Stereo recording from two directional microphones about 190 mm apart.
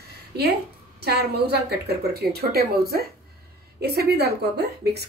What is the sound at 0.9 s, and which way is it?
A woman's voice, 60° right (ahead or behind).